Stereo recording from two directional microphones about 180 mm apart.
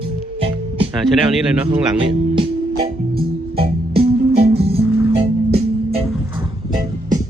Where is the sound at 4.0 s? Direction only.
65° right (ahead or behind).